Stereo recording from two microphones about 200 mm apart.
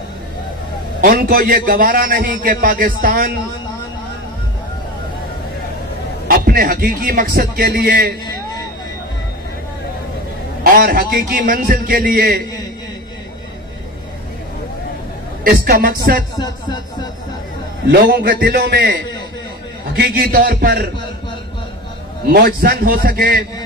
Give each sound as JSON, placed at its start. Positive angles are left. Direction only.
{"t": 1.0, "sound": "a man's voice", "side_deg": -45}
{"t": 6.2, "sound": "a man's voice", "side_deg": -45}
{"t": 10.6, "sound": "a man's voice", "side_deg": -45}
{"t": 15.4, "sound": "a woman's voice", "side_deg": -50}
{"t": 18.0, "sound": "a man's voice", "side_deg": -55}
{"t": 22.3, "sound": "a man's voice", "side_deg": -50}